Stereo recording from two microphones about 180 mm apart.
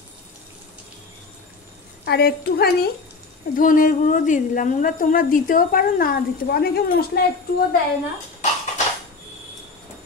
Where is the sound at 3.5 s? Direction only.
50° left (ahead or behind).